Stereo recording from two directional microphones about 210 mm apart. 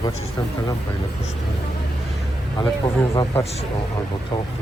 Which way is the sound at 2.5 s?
20° left (ahead or behind).